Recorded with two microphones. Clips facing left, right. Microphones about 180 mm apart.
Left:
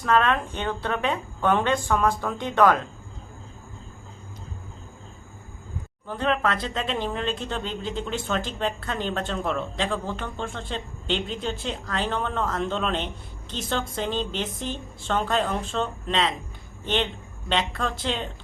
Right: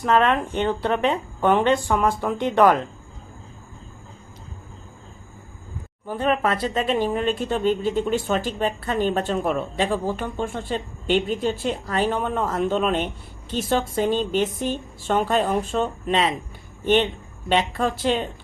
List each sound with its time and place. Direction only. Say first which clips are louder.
0.0 s speech: right 3 dB; 15° right (ahead or behind)
6.1 s speech: right 3 dB; 10° right (ahead or behind)